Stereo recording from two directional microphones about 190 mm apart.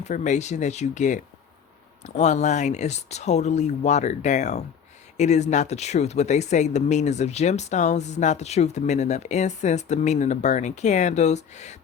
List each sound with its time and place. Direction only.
0.0 s speech: 40° left (ahead or behind)